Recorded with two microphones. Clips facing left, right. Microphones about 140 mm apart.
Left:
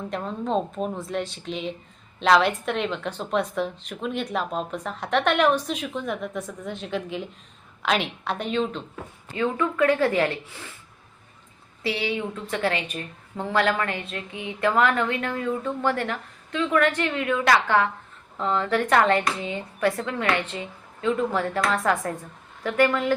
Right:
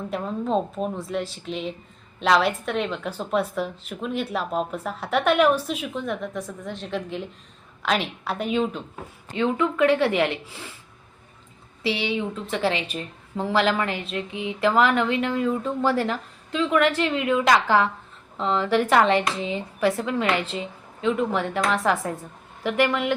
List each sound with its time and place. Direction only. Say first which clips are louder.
0.1 s a woman's voice: right 2 dB; centre (ahead or behind)
9.3 s a woman's voice: right 2 dB; 20° right (ahead or behind)
11.8 s a woman's voice: right 2 dB; 25° right (ahead or behind)